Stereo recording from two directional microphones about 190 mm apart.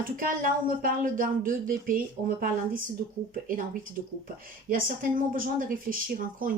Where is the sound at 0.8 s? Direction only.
45° right (ahead or behind).